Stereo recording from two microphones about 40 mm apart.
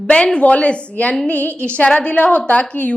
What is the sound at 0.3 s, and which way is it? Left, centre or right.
A woman's voice, left.